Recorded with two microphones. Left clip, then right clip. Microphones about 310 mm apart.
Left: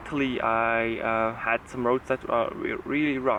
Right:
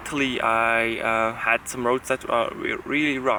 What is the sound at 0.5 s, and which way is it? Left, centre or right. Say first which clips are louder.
Speech: right 4 dB; centre.